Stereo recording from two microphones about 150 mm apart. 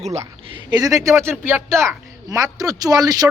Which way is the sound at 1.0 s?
20° right (ahead or behind).